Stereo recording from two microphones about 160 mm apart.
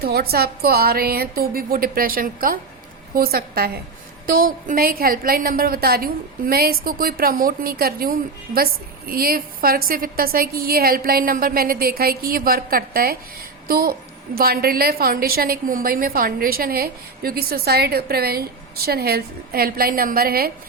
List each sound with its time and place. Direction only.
0.0 s a woman's voice: 75° right (ahead or behind)
4.3 s a woman's voice: 60° right (ahead or behind)